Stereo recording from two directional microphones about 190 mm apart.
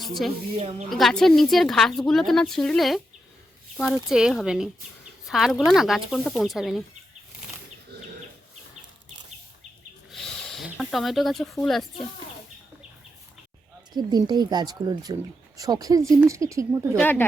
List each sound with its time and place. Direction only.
0.0 s speech: centre (ahead or behind)
0.5 s speech: 35° right (ahead or behind)
0.9 s a woman's voice: centre (ahead or behind)
10.1 s a sound: centre (ahead or behind)
13.9 s speech: 20° right (ahead or behind)
17.0 s speech: 10° left (ahead or behind)